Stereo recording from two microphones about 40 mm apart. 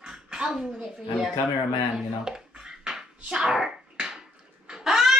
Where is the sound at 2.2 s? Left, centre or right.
Centre.